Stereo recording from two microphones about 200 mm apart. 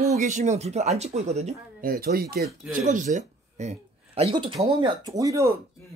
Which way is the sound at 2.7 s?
40° right (ahead or behind).